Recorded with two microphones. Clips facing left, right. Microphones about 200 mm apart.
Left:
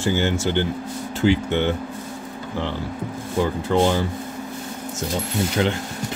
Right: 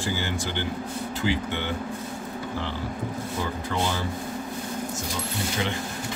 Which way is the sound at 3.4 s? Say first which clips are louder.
Left 11 dB; 55° left (ahead or behind).